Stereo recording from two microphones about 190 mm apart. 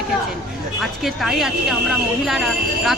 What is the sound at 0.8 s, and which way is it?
Speech, centre (ahead or behind).